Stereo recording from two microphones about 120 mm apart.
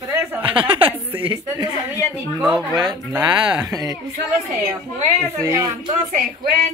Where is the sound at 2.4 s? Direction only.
5° right (ahead or behind).